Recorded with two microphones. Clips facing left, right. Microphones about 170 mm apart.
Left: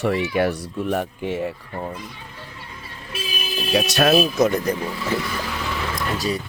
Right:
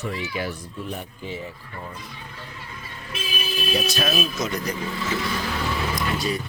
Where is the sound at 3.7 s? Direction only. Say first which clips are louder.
Left 8 dB; 70° left (ahead or behind).